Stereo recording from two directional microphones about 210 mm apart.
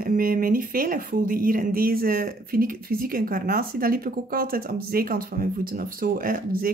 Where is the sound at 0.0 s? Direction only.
45° right (ahead or behind).